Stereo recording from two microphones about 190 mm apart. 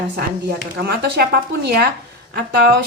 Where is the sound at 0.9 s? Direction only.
55° right (ahead or behind).